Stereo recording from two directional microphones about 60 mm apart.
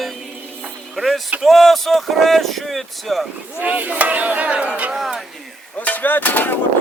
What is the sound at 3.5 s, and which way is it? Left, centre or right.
Speech, right.